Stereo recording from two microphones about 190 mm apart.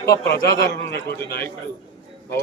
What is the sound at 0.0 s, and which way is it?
Speech, 15° left (ahead or behind).